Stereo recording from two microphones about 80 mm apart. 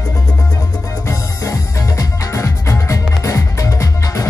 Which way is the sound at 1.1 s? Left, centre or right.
Left.